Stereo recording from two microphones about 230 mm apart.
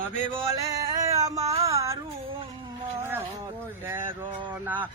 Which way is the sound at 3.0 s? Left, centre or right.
Centre.